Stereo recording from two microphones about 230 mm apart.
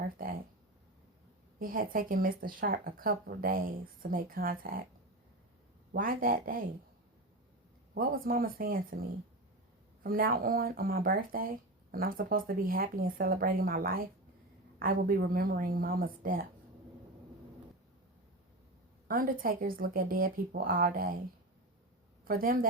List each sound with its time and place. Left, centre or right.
0.2 s a sound: right
1.5 s speech: right
5.9 s speech: right
7.9 s speech: right
19.0 s speech: right
22.2 s speech: right